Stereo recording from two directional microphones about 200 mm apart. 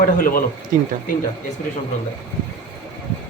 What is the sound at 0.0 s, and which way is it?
Speech, 45° left (ahead or behind).